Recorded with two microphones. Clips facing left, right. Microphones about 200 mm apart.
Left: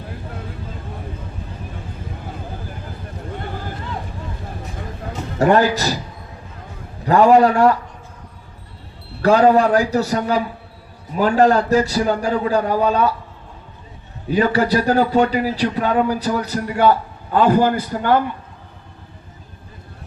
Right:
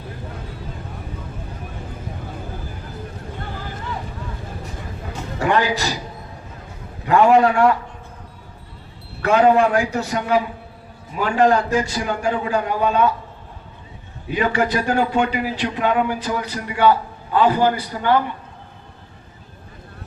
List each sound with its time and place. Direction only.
5.4 s a man's voice: 40° left (ahead or behind)
7.0 s speech: 35° left (ahead or behind)
9.2 s speech: 35° left (ahead or behind)
14.3 s speech: 40° left (ahead or behind)